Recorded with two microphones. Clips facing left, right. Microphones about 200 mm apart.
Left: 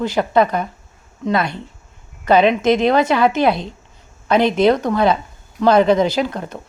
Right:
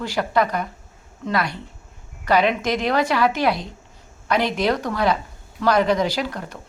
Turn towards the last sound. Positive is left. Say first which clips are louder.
# left 6 dB
turn(degrees=25)  # may be behind; listen again after turning